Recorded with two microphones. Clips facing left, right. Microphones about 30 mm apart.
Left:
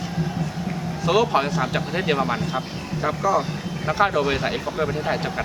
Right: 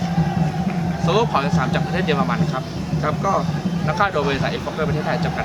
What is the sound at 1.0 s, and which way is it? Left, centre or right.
Speech, centre.